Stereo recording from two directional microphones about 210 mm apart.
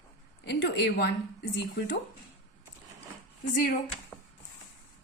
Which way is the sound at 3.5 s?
40° left (ahead or behind).